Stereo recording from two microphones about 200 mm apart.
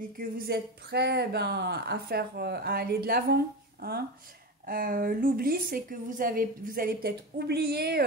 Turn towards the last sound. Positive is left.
turn(degrees=-50)  # may be behind; listen again after turning